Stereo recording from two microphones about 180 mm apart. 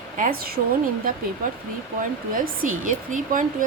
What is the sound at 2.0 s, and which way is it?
A woman's voice, 50° right (ahead or behind).